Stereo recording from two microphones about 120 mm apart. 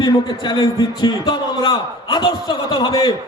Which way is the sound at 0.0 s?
35° left (ahead or behind).